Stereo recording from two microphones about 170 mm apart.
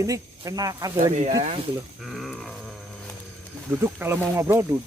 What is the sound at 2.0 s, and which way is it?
Grunt, centre (ahead or behind).